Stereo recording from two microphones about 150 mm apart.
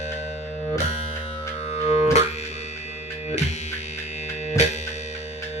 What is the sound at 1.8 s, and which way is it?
Music, 45° left (ahead or behind).